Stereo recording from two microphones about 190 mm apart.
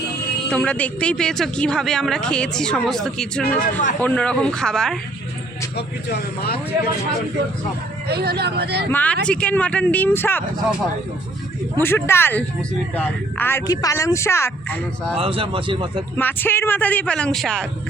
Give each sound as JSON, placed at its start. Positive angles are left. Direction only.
{"t": 0.5, "sound": "speech", "side_deg": 5}
{"t": 3.6, "sound": "speech", "side_deg": 45}
{"t": 4.0, "sound": "speech", "side_deg": 5}
{"t": 5.7, "sound": "speech", "side_deg": 60}
{"t": 8.0, "sound": "speech", "side_deg": -55}
{"t": 8.9, "sound": "speech", "side_deg": 10}
{"t": 11.8, "sound": "speech", "side_deg": 10}
{"t": 15.2, "sound": "speech", "side_deg": -30}
{"t": 16.1, "sound": "speech", "side_deg": 10}